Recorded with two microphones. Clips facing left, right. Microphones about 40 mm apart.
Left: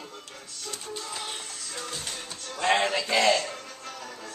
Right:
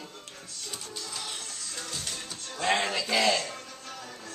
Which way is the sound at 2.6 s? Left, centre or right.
Centre.